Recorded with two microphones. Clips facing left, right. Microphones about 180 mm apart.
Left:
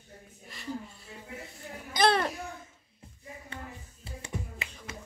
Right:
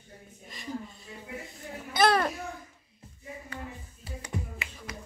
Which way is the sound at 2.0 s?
25° left (ahead or behind).